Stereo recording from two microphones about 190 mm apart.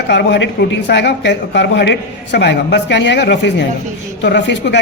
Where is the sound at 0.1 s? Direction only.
65° left (ahead or behind).